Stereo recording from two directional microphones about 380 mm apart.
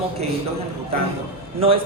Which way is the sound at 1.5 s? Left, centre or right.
Centre.